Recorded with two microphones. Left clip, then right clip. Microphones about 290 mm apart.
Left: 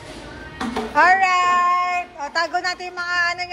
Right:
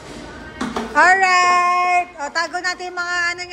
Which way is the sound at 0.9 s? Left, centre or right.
Centre.